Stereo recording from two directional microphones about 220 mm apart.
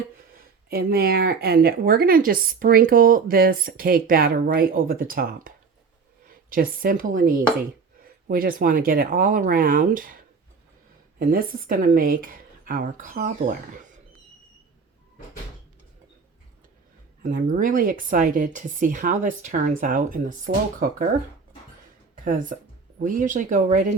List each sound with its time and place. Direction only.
0.7 s a woman's voice: 45° right (ahead or behind)
11.2 s a woman's voice: 40° right (ahead or behind)
17.2 s a woman's voice: 35° right (ahead or behind)
22.2 s a woman's voice: 40° right (ahead or behind)